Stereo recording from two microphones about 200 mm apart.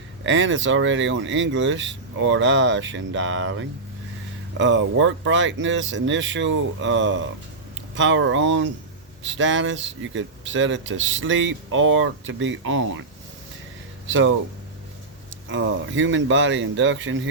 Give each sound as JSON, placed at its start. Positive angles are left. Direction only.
{"t": 0.3, "sound": "speech", "side_deg": -70}
{"t": 14.1, "sound": "speech", "side_deg": -70}
{"t": 15.5, "sound": "speech", "side_deg": -70}